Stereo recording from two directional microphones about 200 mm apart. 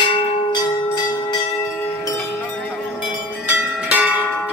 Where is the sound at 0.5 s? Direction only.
20° left (ahead or behind).